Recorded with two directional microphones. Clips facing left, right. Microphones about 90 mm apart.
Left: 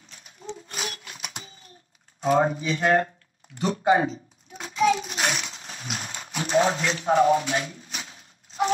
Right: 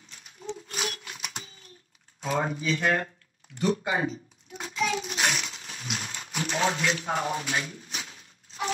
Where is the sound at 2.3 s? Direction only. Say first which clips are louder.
Left 5 dB; 25° left (ahead or behind).